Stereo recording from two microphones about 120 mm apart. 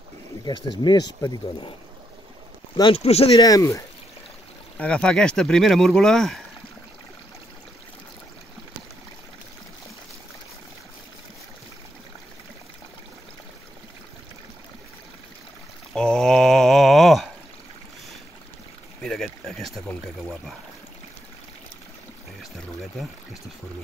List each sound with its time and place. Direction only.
0.5 s speech: 40° left (ahead or behind)
2.8 s speech: 55° left (ahead or behind)
3.3 s speech: 30° left (ahead or behind)
4.7 s speech: 10° left (ahead or behind)
15.9 s a sound: 5° left (ahead or behind)
18.9 s a sound: centre (ahead or behind)